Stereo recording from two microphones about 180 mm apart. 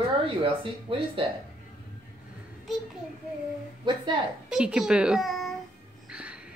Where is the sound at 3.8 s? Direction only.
25° right (ahead or behind).